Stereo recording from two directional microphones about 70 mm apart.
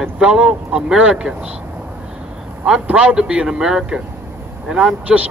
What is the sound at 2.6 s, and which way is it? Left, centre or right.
Speech, centre.